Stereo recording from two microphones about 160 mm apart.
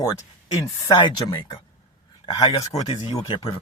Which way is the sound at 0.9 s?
30° left (ahead or behind).